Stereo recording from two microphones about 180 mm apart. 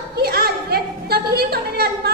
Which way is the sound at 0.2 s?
60° right (ahead or behind).